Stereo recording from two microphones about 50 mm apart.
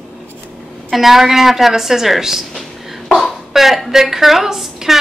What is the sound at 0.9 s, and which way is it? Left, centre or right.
A woman's voice, centre.